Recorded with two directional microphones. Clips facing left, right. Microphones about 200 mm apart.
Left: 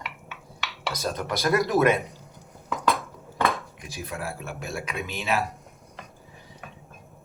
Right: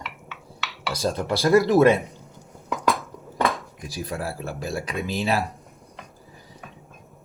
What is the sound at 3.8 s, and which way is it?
Speech, 35° right (ahead or behind).